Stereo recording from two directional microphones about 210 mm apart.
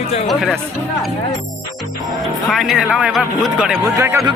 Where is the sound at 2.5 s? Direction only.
Centre (ahead or behind).